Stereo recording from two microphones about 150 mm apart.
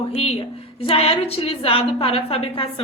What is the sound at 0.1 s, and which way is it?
A woman's voice, 40° left (ahead or behind).